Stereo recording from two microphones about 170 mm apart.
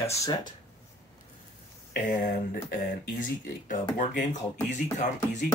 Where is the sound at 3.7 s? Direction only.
50° left (ahead or behind).